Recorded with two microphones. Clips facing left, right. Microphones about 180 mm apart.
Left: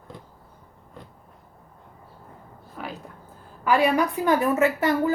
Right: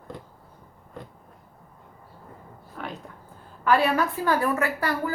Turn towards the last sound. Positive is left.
turn(degrees=20)  # may be behind; listen again after turning